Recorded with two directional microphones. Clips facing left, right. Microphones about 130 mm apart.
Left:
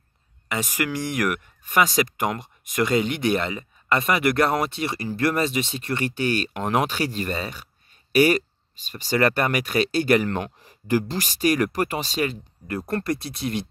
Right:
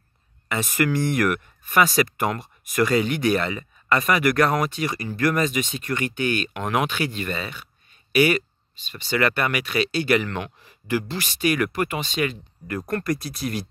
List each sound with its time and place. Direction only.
0.5 s speech: 15° left (ahead or behind)